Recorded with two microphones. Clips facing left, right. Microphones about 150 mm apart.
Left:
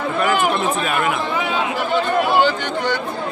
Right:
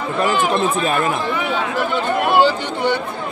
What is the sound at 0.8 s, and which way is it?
Speech, 35° right (ahead or behind).